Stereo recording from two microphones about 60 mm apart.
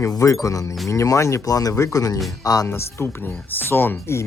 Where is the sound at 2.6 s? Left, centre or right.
Left.